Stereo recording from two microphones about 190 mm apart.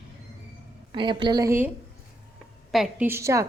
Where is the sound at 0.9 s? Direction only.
25° right (ahead or behind).